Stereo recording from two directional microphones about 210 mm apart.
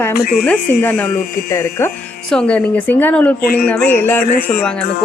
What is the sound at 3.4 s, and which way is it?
Speech, 45° left (ahead or behind).